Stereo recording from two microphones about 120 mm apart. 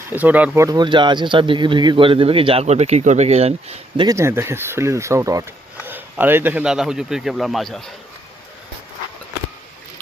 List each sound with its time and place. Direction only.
0.1 s speech: 15° right (ahead or behind)
0.5 s speech: 25° right (ahead or behind)
0.8 s speech: 40° right (ahead or behind); by 4.0 s 60° right (ahead or behind)
4.0 s speech: 25° right (ahead or behind)
5.7 s speech: 15° right (ahead or behind); by 7.9 s centre (ahead or behind)